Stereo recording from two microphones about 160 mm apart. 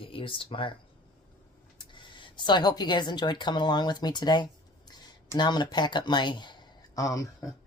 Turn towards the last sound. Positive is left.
turn(degrees=20)  # may be behind; listen again after turning